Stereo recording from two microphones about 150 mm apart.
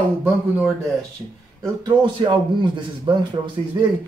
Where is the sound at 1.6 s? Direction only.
30° right (ahead or behind).